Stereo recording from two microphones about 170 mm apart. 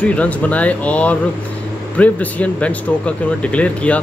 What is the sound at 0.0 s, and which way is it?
Speech, 10° left (ahead or behind).